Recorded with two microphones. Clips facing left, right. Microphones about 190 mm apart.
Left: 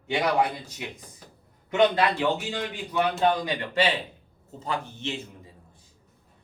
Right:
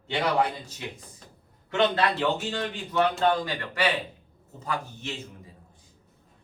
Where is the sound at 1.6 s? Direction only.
15° left (ahead or behind).